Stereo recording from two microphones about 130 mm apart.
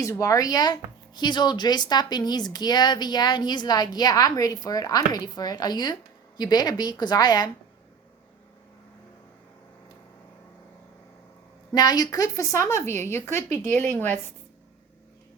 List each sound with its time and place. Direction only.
0.0 s speech: 25° left (ahead or behind)
11.7 s a woman's voice: 30° left (ahead or behind); by 14.3 s 15° left (ahead or behind)